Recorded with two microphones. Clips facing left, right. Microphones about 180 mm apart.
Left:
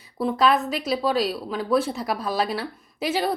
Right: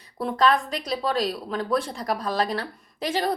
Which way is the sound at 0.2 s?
5° left (ahead or behind).